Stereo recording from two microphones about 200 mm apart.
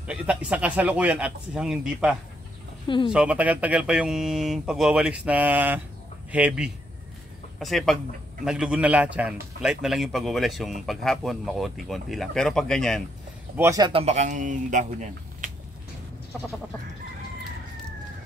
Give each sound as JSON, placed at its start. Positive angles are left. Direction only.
{"t": 0.0, "sound": "a man's voice", "side_deg": -5}
{"t": 13.6, "sound": "speech", "side_deg": -15}